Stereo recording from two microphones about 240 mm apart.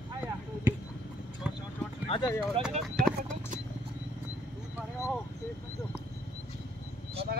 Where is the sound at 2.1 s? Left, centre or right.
Centre.